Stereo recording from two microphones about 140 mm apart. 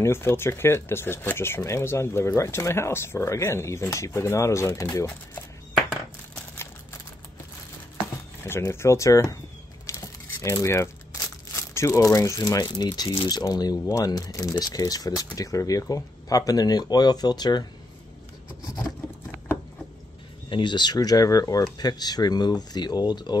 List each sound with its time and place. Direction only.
0.0 s speech: 15° left (ahead or behind)
8.5 s speech: 20° left (ahead or behind)
9.8 s crumpling: 20° left (ahead or behind)
11.5 s speech: 20° left (ahead or behind)
20.4 s speech: 35° left (ahead or behind)